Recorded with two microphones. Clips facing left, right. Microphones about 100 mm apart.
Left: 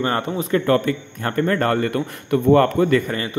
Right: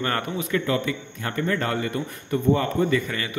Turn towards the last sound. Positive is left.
turn(degrees=40)  # may be behind; listen again after turning